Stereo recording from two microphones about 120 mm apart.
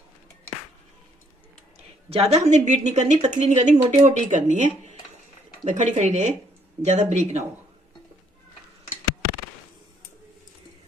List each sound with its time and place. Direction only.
2.0 s speech: 55° right (ahead or behind); by 6.3 s 85° right
6.8 s speech: 70° right (ahead or behind)